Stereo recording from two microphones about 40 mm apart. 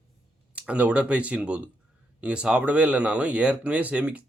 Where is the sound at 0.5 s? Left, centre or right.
Right.